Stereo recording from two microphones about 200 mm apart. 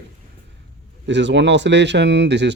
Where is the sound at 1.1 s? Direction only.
60° right (ahead or behind).